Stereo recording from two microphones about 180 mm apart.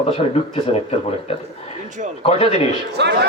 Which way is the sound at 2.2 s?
35° left (ahead or behind).